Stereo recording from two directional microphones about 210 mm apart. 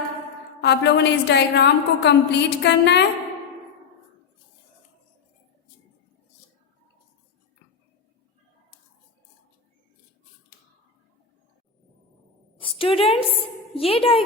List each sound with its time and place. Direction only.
0.6 s a woman's voice: 55° left (ahead or behind)
12.8 s a woman's voice: 25° left (ahead or behind)
13.3 s a sound: 25° left (ahead or behind)